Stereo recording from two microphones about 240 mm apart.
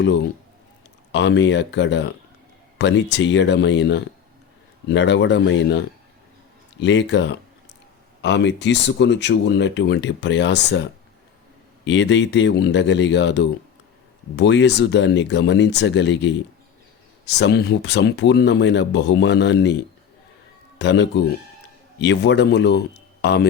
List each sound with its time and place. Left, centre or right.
1.1 s speech: left
11.9 s speech: left
20.7 s speech: left